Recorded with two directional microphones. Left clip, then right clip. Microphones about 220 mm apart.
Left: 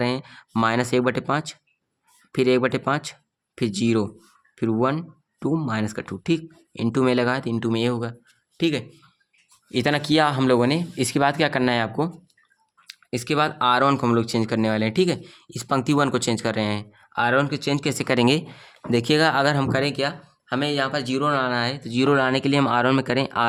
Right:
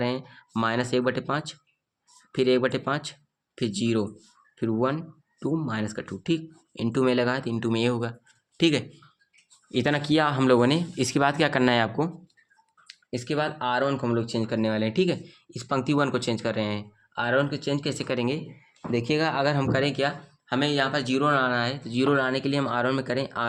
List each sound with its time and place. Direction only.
0.0 s speech: 25° left (ahead or behind)
8.5 s speech: centre (ahead or behind)
9.7 s speech: 15° left (ahead or behind)
12.9 s speech: 35° left (ahead or behind)